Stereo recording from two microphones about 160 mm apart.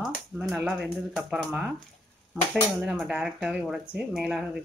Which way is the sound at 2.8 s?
5° right (ahead or behind).